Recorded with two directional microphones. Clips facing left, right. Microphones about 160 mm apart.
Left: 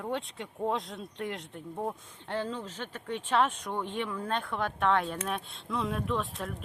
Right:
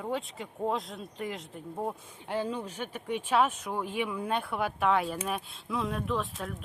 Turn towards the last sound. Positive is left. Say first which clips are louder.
# even
turn(degrees=0)  # may be behind; listen again after turning